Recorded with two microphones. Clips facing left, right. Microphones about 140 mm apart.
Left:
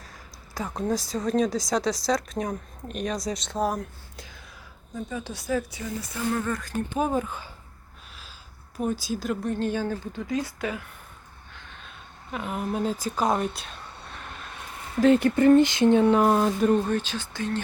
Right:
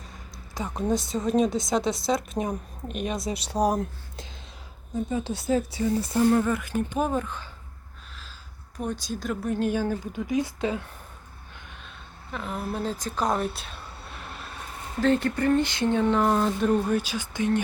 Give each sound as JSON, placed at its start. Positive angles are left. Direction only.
{"t": 0.5, "sound": "a woman's voice", "side_deg": 0}
{"t": 6.4, "sound": "a woman's voice", "side_deg": -10}
{"t": 6.9, "sound": "speech", "side_deg": 5}
{"t": 8.8, "sound": "speech", "side_deg": 5}
{"t": 9.5, "sound": "a woman's voice", "side_deg": -10}
{"t": 12.3, "sound": "speech", "side_deg": 15}
{"t": 15.0, "sound": "speech", "side_deg": 15}
{"t": 16.6, "sound": "a woman's voice", "side_deg": 0}